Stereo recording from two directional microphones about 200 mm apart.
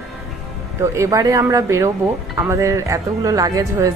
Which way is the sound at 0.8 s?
15° right (ahead or behind).